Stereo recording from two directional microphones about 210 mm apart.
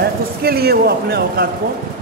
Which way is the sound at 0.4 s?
50° right (ahead or behind).